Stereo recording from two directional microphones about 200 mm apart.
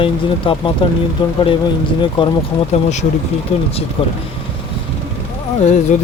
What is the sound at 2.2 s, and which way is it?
Speech, 25° left (ahead or behind).